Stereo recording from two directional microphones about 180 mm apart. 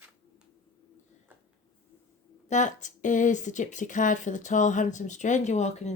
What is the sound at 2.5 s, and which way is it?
Speech, 45° left (ahead or behind).